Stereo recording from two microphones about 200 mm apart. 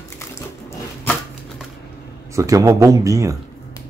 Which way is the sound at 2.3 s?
15° right (ahead or behind).